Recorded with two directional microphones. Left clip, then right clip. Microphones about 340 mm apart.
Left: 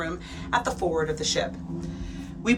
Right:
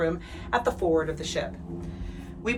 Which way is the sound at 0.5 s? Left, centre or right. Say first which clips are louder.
Right 1 dB; centre.